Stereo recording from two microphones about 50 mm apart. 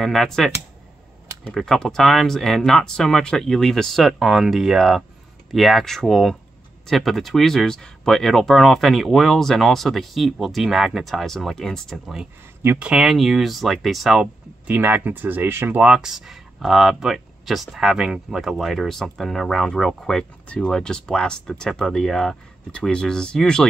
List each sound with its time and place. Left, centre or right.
0.0 s speech: centre
1.5 s speech: centre
12.7 s speech: right
13.0 s speech: centre
14.7 s speech: right
15.9 s speech: centre
20.4 s speech: centre
22.7 s speech: left